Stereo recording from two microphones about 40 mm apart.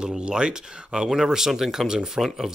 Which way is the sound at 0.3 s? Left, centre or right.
Centre.